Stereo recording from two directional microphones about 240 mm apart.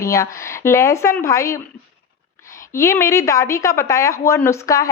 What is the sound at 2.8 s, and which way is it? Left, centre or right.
Speech, centre.